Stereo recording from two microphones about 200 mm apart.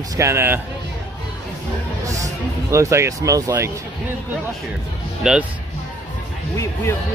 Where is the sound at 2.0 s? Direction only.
15° right (ahead or behind).